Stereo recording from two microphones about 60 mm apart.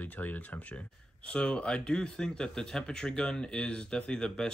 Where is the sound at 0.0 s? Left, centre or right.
Left.